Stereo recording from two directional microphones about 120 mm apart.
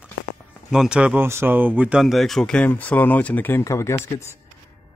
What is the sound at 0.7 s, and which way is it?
Speech, 5° right (ahead or behind).